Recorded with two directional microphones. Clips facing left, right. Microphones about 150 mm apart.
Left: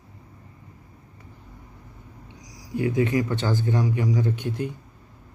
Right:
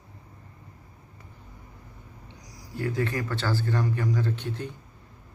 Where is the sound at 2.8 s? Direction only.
15° left (ahead or behind).